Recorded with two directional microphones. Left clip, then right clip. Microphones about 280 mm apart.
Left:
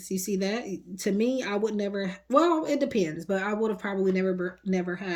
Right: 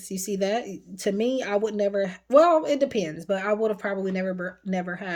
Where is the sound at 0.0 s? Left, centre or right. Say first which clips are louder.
Right 3 dB; centre.